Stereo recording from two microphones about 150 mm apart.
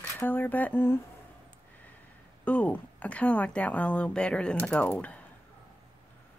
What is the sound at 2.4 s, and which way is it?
Speech, 10° left (ahead or behind).